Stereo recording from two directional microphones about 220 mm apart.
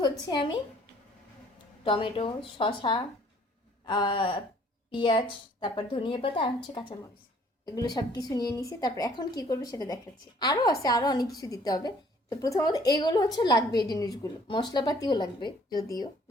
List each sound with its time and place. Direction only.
0.0 s a woman's voice: 20° left (ahead or behind)
1.8 s speech: 25° left (ahead or behind)
7.6 s a woman's voice: 15° left (ahead or behind)